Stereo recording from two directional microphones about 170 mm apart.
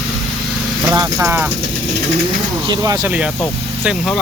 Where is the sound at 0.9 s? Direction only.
20° right (ahead or behind).